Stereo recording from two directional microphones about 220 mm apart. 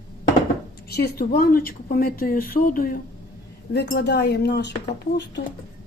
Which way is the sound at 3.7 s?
50° left (ahead or behind).